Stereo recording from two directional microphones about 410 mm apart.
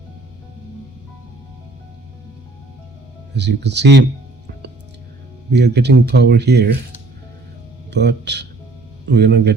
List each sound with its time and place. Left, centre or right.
3.3 s speech: right
5.5 s speech: right
7.9 s speech: right